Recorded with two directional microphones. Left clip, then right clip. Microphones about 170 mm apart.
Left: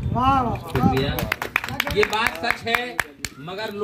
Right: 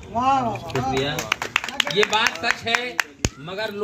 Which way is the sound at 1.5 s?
35° left (ahead or behind).